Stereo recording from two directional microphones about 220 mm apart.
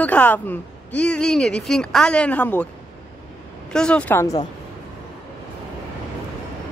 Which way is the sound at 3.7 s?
5° left (ahead or behind).